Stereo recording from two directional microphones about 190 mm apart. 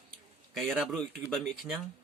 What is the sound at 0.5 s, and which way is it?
Speech, centre (ahead or behind).